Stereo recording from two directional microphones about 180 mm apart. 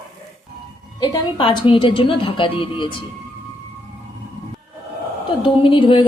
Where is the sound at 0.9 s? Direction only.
25° left (ahead or behind).